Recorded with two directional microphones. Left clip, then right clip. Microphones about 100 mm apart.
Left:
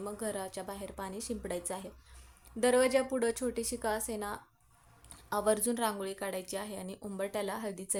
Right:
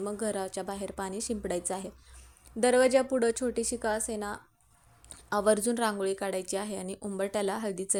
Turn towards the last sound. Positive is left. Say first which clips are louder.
# right 6 dB
turn(degrees=-45)  # may be behind; listen again after turning